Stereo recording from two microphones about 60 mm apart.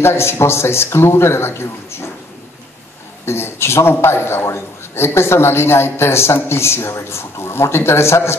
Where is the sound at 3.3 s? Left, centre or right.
Left.